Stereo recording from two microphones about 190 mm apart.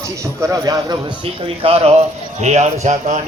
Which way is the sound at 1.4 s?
30° right (ahead or behind).